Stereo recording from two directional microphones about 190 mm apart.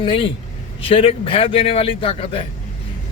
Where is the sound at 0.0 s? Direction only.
30° left (ahead or behind).